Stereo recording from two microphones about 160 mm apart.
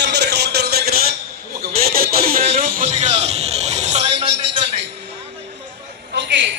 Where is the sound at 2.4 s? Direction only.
40° right (ahead or behind).